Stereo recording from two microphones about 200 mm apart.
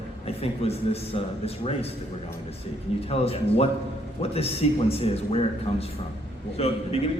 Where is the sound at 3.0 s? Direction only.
30° left (ahead or behind).